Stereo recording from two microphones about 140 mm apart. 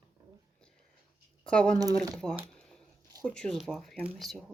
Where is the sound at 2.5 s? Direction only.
5° left (ahead or behind).